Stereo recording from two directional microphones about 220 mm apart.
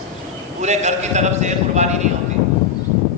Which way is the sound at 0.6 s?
30° right (ahead or behind).